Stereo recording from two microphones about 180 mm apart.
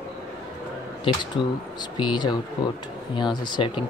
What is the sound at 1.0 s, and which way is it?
Speech, 25° left (ahead or behind).